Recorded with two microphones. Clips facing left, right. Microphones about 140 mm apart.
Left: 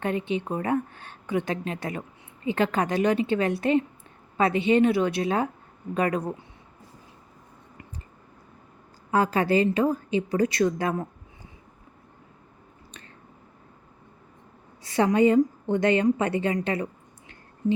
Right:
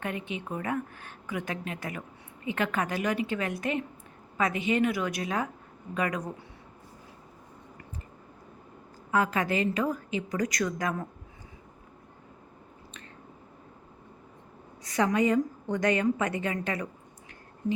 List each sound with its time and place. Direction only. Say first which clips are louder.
0.0 s a woman's voice: left 7 dB; 30° left (ahead or behind)
9.1 s a woman's voice: left 5 dB; 30° left (ahead or behind)
14.8 s a woman's voice: left 5 dB; 30° left (ahead or behind)